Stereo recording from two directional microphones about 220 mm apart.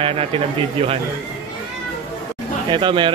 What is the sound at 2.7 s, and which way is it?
Speech, 20° right (ahead or behind).